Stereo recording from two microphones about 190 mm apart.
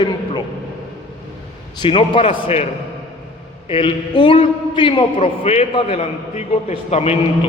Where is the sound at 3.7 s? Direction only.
25° left (ahead or behind).